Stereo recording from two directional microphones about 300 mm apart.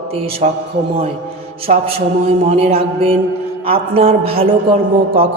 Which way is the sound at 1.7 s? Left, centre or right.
Right.